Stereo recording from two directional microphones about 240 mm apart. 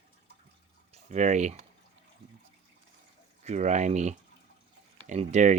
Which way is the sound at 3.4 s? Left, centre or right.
Right.